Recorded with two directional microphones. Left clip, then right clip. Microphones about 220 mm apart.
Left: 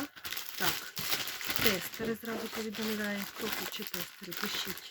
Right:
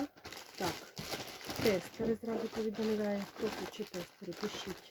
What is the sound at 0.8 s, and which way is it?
Speech, 15° left (ahead or behind).